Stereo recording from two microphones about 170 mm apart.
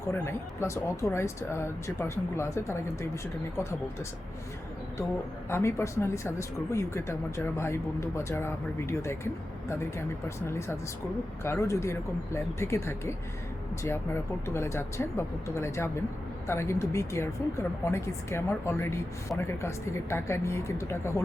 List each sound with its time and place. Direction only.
0.1 s speech: 15° left (ahead or behind)
5.5 s speech: 15° left (ahead or behind)